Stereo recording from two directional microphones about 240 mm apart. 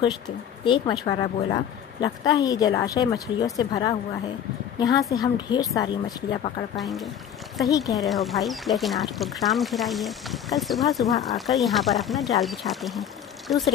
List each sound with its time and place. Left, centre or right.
0.7 s a woman's voice: centre
6.8 s speech: centre